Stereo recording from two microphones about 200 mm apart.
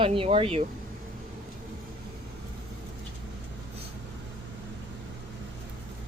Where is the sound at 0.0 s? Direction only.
25° right (ahead or behind).